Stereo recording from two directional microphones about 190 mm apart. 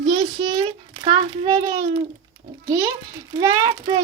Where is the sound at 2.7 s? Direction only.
15° right (ahead or behind).